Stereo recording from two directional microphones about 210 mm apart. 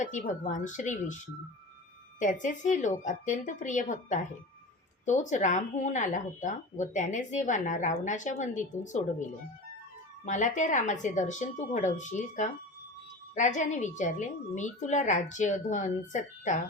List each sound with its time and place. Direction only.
0.0 s speech: 35° left (ahead or behind)